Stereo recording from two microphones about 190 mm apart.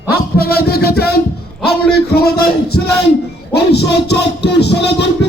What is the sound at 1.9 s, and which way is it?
Music, 55° left (ahead or behind).